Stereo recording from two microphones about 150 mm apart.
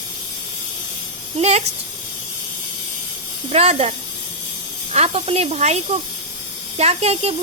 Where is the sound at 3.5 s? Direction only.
45° right (ahead or behind).